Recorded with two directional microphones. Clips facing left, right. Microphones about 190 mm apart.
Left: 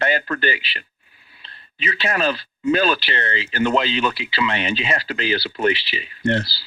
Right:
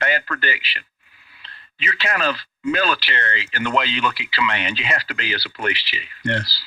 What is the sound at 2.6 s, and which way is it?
Speech, 25° left (ahead or behind).